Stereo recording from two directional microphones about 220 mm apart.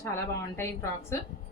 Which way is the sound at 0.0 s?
10° left (ahead or behind).